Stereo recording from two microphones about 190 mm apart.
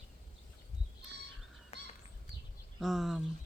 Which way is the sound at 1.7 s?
35° left (ahead or behind).